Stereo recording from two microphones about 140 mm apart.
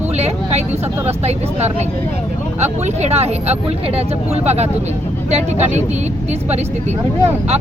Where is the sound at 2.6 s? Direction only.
55° right (ahead or behind).